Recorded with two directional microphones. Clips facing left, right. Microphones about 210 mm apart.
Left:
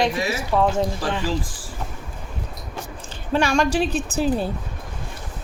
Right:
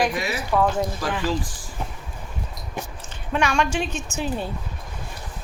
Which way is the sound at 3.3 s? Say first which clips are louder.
Left 3 dB; 35° left (ahead or behind).